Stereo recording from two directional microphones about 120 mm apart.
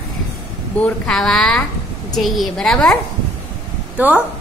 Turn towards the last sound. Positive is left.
turn(degrees=-15)  # may be behind; listen again after turning